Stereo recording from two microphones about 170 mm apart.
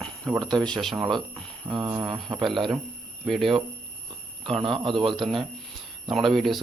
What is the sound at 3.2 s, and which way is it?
Speech, centre (ahead or behind).